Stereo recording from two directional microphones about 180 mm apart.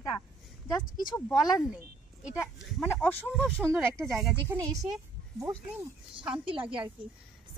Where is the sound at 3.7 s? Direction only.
15° right (ahead or behind).